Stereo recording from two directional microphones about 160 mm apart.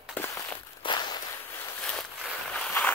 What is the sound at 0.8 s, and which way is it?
Walk, 30° left (ahead or behind).